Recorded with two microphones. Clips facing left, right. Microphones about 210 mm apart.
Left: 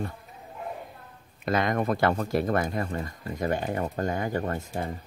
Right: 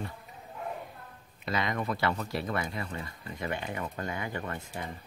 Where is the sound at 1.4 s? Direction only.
50° left (ahead or behind).